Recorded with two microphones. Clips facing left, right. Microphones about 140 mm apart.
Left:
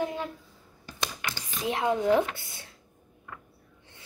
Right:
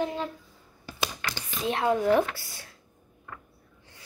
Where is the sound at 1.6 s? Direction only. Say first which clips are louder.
Right 1 dB; 20° left (ahead or behind).